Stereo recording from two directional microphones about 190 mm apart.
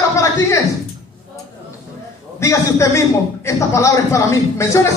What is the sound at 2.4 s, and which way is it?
Speech, 15° left (ahead or behind).